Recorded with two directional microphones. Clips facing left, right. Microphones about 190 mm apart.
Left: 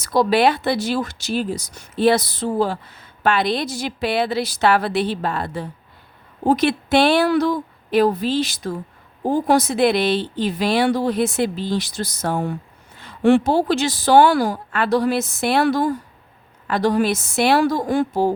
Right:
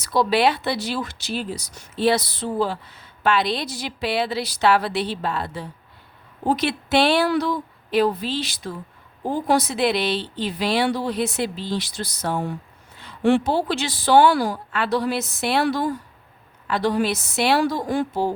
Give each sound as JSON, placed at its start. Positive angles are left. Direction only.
{"t": 0.0, "sound": "speech", "side_deg": 45}